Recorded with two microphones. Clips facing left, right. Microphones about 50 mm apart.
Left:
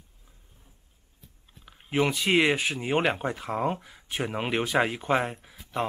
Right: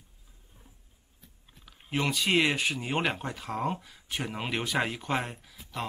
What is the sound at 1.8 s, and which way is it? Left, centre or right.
Speech, centre.